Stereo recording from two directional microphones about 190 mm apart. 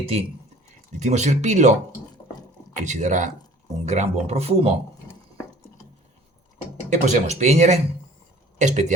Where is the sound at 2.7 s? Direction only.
40° right (ahead or behind).